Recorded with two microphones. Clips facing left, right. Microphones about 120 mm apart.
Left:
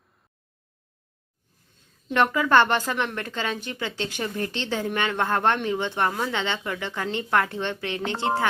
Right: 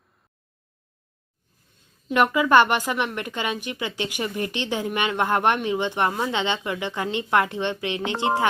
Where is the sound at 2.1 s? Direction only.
10° right (ahead or behind).